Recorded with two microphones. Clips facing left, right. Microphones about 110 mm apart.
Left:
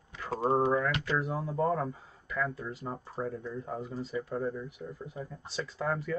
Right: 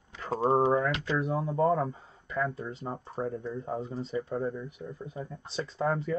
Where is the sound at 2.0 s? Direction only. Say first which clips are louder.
Right 2 dB; 30° right (ahead or behind).